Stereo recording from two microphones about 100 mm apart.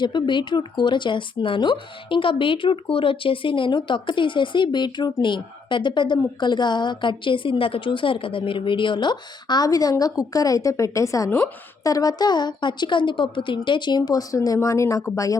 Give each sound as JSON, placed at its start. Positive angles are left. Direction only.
{"t": 0.0, "sound": "a woman's voice", "side_deg": 50}